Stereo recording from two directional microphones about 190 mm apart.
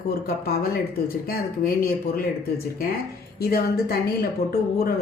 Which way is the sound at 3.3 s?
55° left (ahead or behind).